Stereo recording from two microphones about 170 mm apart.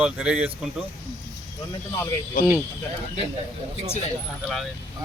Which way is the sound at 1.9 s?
20° left (ahead or behind).